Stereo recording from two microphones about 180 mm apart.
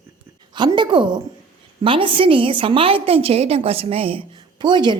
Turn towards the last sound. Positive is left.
turn(degrees=-25)  # may be behind; listen again after turning